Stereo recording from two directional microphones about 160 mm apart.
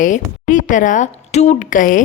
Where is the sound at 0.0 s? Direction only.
55° left (ahead or behind).